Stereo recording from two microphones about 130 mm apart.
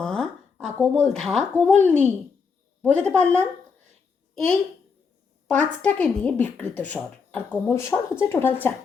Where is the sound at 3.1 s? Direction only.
10° left (ahead or behind).